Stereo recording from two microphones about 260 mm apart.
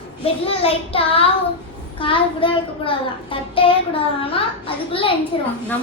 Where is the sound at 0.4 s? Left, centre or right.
Left.